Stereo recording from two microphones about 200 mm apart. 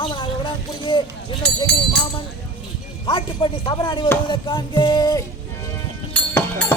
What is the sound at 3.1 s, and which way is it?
Speech, 25° left (ahead or behind).